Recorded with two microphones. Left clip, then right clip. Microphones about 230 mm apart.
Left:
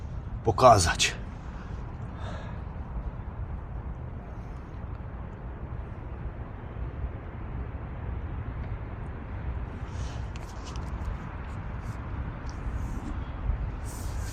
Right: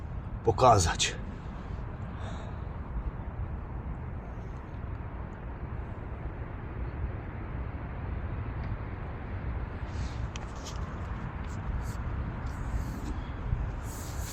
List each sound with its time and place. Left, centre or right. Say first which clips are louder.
0.4 s speech: left 4 dB; left